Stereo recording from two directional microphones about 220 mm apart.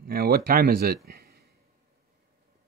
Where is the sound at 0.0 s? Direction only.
45° right (ahead or behind).